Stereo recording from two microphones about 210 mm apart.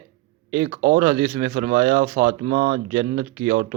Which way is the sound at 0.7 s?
40° right (ahead or behind).